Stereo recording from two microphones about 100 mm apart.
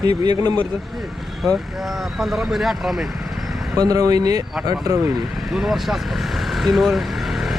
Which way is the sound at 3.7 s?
40° right (ahead or behind).